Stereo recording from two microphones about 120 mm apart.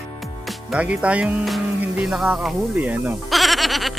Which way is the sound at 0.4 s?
10° right (ahead or behind).